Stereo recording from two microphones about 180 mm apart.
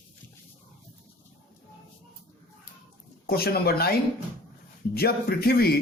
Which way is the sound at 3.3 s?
60° left (ahead or behind).